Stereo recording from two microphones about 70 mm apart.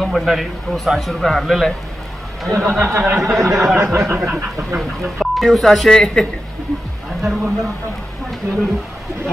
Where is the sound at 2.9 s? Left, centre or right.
Right.